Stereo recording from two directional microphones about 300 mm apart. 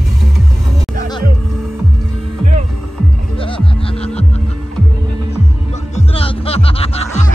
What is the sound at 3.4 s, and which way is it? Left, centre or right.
Throbbing, centre.